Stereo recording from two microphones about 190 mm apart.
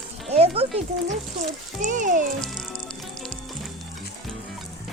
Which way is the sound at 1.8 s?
40° right (ahead or behind).